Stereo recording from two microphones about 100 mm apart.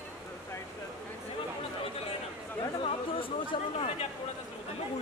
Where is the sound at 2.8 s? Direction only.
65° left (ahead or behind); by 4.0 s 85° left.